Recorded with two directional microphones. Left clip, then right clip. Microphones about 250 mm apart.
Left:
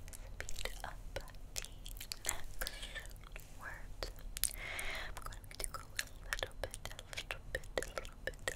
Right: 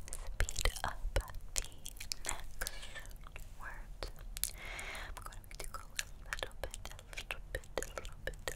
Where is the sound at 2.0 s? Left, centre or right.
Centre.